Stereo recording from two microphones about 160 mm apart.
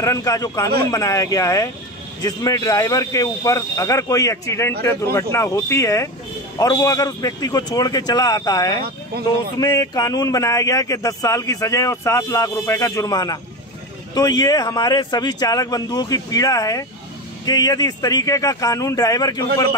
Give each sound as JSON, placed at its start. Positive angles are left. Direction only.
{"t": 0.0, "sound": "speech", "side_deg": 20}